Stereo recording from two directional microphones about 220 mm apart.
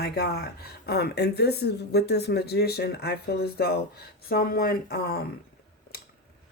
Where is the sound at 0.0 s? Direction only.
45° left (ahead or behind).